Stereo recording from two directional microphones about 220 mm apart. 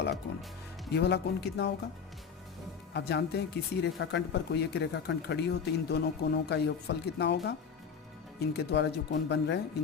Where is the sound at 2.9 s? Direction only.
50° left (ahead or behind).